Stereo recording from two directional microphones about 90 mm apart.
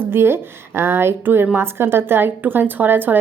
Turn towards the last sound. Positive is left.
turn(degrees=-20)  # may be behind; listen again after turning